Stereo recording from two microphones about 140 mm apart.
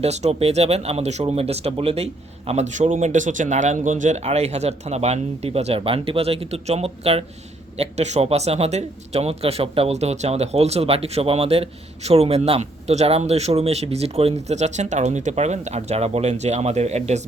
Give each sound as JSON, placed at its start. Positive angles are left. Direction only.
{"t": 0.0, "sound": "speech", "side_deg": -50}